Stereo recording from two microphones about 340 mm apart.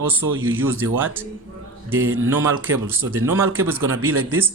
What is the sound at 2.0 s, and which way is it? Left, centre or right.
Speech, right.